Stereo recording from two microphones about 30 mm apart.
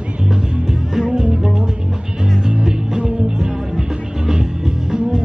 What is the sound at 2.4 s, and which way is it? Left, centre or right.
Music, right.